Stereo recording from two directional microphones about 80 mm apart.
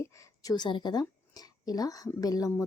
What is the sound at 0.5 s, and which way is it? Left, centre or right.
A woman's voice, left.